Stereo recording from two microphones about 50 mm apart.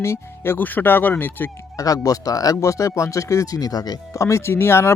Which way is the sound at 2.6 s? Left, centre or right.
Left.